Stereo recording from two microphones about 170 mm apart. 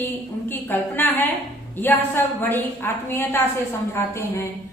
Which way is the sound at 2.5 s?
15° left (ahead or behind).